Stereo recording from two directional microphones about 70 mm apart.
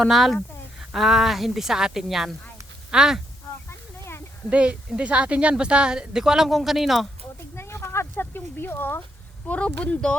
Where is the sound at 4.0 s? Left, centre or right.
Left.